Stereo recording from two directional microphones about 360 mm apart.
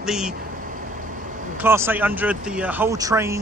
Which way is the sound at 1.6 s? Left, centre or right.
Centre.